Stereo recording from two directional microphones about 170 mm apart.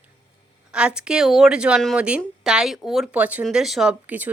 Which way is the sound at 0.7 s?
5° right (ahead or behind).